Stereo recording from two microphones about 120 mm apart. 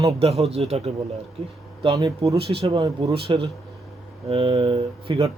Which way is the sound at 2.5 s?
50° right (ahead or behind).